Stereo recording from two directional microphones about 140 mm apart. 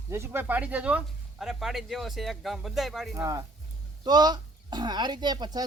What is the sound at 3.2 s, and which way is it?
Speech, 25° right (ahead or behind).